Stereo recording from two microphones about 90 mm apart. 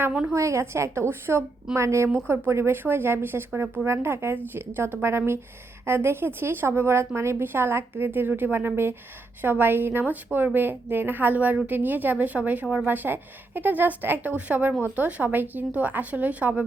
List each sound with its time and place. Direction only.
0.1 s a woman's voice: 10° right (ahead or behind)
0.3 s a woman's voice: 35° right (ahead or behind); by 16.6 s 15° right (ahead or behind)